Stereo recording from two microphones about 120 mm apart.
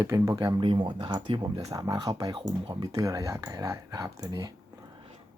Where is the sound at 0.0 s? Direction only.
25° right (ahead or behind).